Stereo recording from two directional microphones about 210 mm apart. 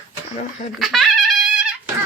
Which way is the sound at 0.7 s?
Centre (ahead or behind).